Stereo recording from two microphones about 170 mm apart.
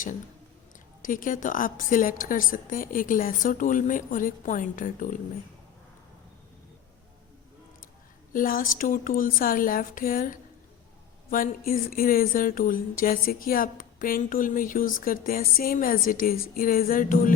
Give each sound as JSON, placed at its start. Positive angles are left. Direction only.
{"t": 1.0, "sound": "a woman's voice", "side_deg": 50}
{"t": 8.3, "sound": "speech", "side_deg": 55}